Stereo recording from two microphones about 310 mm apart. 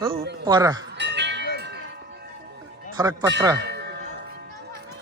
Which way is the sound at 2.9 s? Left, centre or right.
Centre.